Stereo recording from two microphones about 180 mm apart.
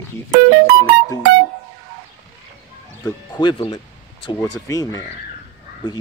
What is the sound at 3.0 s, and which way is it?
Speech, 20° left (ahead or behind).